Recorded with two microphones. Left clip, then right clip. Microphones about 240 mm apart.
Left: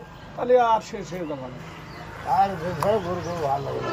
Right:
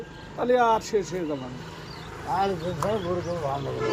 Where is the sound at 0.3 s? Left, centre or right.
Centre.